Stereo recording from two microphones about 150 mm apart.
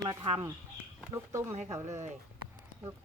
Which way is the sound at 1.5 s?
50° right (ahead or behind).